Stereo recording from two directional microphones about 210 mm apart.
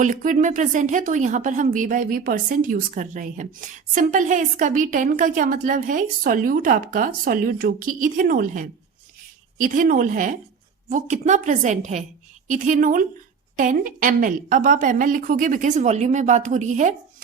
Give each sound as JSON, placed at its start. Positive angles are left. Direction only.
{"t": 0.0, "sound": "a woman's voice", "side_deg": -35}